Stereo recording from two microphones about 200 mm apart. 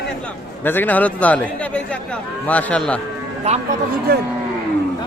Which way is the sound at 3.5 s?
30° right (ahead or behind).